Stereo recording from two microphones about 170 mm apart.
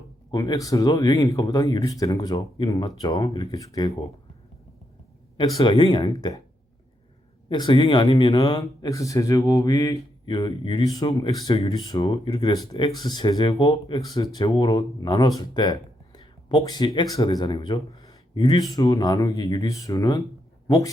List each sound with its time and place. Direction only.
0.3 s speech: 25° left (ahead or behind)
5.4 s speech: 25° left (ahead or behind)
7.5 s speech: 25° left (ahead or behind)